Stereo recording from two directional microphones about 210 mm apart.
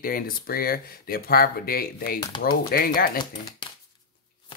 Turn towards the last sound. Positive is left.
turn(degrees=45)  # may be behind; listen again after turning